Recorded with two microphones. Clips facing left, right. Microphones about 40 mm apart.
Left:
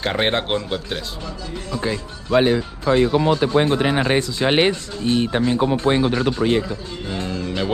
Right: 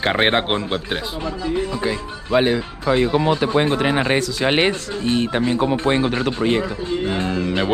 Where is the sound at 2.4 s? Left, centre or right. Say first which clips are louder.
Left 1 dB; right.